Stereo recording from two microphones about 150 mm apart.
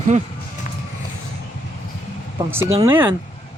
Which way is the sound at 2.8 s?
15° right (ahead or behind).